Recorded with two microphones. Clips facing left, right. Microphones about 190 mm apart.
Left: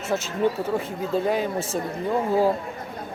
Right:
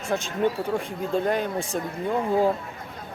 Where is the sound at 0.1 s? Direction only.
5° left (ahead or behind).